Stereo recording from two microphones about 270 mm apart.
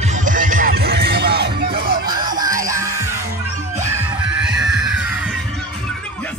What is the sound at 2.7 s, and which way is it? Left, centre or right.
Music, centre.